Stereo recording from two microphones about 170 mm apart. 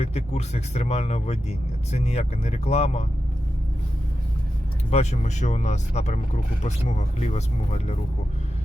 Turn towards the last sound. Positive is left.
turn(degrees=40)  # may be behind; listen again after turning